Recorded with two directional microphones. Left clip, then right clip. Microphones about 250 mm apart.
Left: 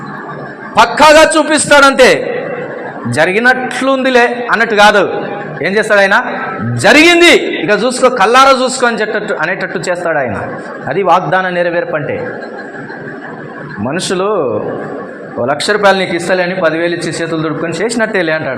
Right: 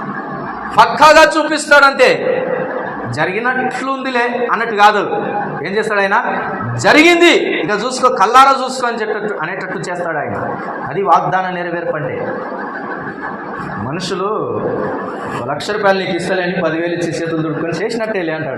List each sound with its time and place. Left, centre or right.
0.8 s a man's voice: left
3.2 s a man's voice: left
13.9 s a man's voice: left
15.4 s a man's voice: left
17.7 s a man's voice: left